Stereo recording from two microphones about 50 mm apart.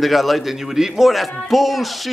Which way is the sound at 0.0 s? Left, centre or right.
Centre.